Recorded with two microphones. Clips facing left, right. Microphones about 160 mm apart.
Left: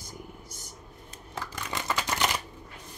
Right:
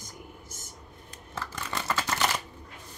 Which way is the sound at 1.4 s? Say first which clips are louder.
Even; 15° left (ahead or behind).